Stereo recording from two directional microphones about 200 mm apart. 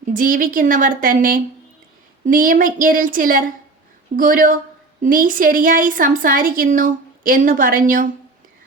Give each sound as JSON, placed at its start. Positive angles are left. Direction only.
{"t": 0.1, "sound": "a woman's voice", "side_deg": -45}